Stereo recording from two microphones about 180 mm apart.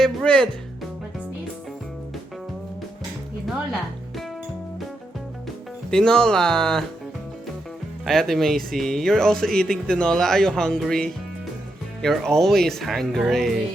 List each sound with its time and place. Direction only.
0.0 s speech: 5° left (ahead or behind)
5.9 s speech: 5° left (ahead or behind)
8.0 s speech: centre (ahead or behind)